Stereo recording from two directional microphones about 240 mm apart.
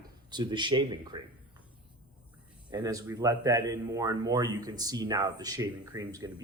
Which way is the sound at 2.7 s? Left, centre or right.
Centre.